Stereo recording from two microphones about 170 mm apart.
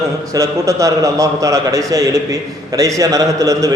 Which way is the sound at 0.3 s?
20° right (ahead or behind).